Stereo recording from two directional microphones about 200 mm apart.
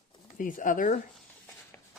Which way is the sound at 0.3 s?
40° left (ahead or behind).